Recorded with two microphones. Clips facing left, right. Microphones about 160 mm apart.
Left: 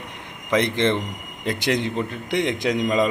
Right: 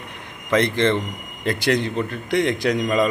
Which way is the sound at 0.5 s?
15° left (ahead or behind).